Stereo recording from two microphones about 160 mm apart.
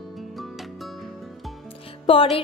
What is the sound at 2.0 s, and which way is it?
Speech, 35° left (ahead or behind).